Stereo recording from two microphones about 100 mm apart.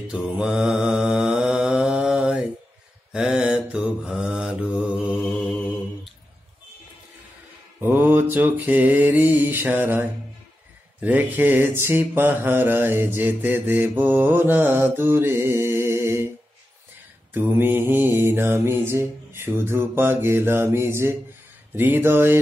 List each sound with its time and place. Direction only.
0.1 s mantra: 10° right (ahead or behind)
5.3 s mantra: 5° left (ahead or behind)
7.8 s mantra: 20° right (ahead or behind)
17.3 s mantra: 20° right (ahead or behind)